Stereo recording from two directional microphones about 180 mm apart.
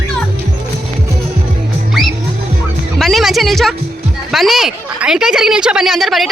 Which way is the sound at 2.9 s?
Centre (ahead or behind).